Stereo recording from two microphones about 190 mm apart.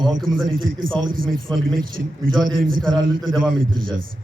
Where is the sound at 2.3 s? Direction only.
50° right (ahead or behind).